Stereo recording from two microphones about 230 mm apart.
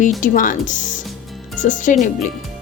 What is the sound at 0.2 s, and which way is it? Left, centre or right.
A woman's voice, left.